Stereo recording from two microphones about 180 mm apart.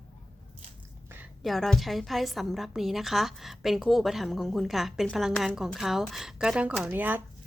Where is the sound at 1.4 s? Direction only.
Centre (ahead or behind).